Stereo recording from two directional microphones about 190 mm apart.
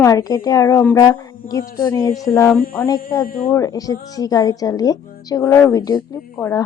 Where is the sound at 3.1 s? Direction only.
20° left (ahead or behind).